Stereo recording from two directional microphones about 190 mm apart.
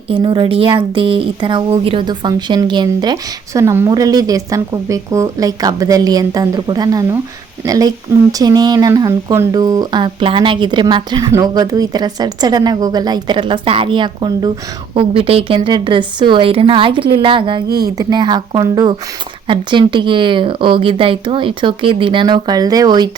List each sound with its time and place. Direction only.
0.1 s speech: 25° right (ahead or behind)